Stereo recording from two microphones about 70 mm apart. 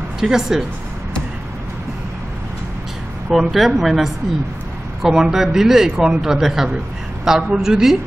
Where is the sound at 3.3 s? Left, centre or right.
Centre.